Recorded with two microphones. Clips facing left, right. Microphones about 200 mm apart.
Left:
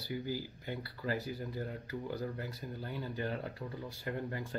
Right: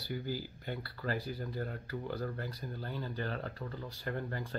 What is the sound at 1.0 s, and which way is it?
Speech, 15° left (ahead or behind).